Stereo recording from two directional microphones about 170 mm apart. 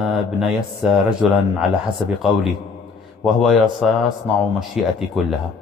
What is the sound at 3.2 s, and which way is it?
A man's voice, centre (ahead or behind).